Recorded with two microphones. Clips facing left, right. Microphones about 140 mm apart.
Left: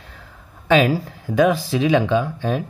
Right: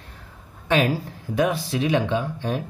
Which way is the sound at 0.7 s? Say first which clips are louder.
Left 5 dB; 90° left.